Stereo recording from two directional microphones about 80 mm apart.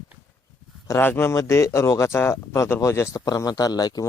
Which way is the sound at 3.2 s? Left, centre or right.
Left.